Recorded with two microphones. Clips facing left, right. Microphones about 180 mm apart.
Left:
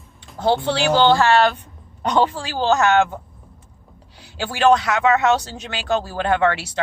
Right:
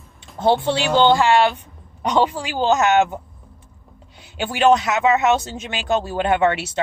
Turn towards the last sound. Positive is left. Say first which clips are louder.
# right 1 dB
turn(degrees=-20)  # may be behind; listen again after turning